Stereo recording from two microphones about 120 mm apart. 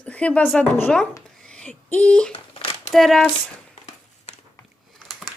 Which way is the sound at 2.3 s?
50° left (ahead or behind).